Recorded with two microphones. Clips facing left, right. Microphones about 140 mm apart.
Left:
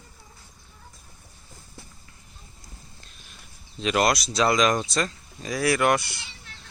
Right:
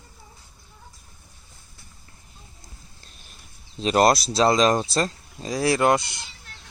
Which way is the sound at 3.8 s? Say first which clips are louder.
Right 4 dB; 35° right (ahead or behind).